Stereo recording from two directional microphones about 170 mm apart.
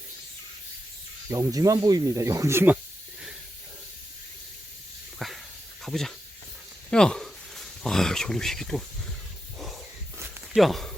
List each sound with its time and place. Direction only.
1.3 s speech: 20° right (ahead or behind)
5.2 s a sound: centre (ahead or behind)
5.8 s speech: centre (ahead or behind)
10.5 s speech: centre (ahead or behind)